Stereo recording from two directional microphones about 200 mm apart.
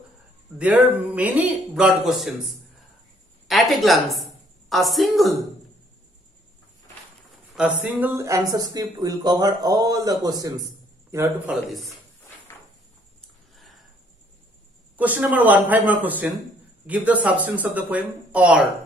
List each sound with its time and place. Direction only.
0.6 s speech: 5° right (ahead or behind)
3.4 s a woman's voice: centre (ahead or behind)
7.5 s speech: 10° right (ahead or behind)
15.0 s speech: 10° right (ahead or behind)